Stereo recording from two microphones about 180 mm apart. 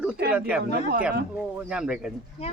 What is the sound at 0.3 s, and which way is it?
Speech, 5° right (ahead or behind).